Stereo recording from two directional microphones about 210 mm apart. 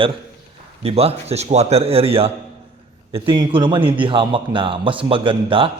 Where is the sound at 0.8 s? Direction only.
30° right (ahead or behind).